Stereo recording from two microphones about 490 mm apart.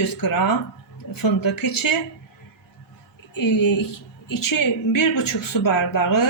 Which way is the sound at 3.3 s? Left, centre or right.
Left.